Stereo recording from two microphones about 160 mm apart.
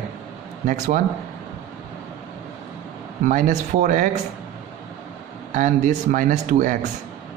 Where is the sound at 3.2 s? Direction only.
50° right (ahead or behind).